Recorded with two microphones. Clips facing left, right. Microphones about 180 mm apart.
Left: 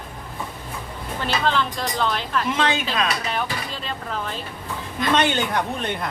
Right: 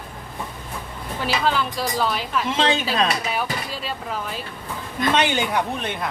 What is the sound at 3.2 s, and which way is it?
Speech, 5° right (ahead or behind).